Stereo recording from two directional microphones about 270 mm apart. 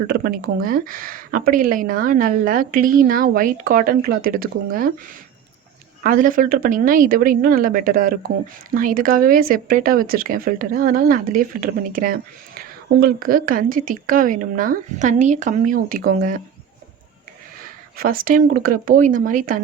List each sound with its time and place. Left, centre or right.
0.1 s a woman's voice: right
6.0 s a woman's voice: right
17.9 s a woman's voice: right